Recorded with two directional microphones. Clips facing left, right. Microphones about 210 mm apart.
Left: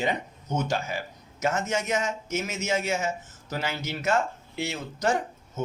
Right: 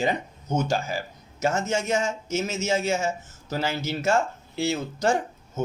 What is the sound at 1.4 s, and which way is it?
Speech, 30° right (ahead or behind).